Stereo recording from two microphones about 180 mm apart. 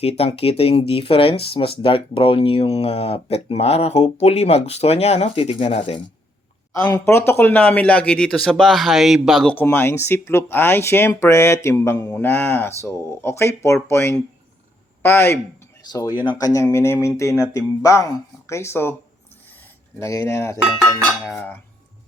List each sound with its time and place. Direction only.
0.0 s speech: 35° left (ahead or behind)
6.8 s speech: 15° left (ahead or behind)
20.0 s speech: 15° left (ahead or behind)